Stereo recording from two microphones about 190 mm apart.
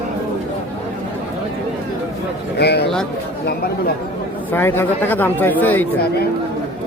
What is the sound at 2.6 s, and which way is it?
Speech, 60° left (ahead or behind).